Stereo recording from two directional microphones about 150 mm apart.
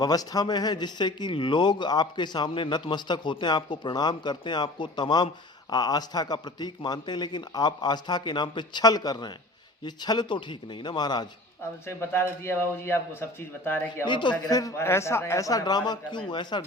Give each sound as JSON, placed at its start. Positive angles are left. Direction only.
{"t": 0.0, "sound": "speech", "side_deg": 25}
{"t": 11.9, "sound": "speech", "side_deg": 15}
{"t": 14.0, "sound": "speech", "side_deg": 30}